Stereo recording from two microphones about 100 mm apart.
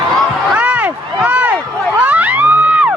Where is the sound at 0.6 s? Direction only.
15° right (ahead or behind).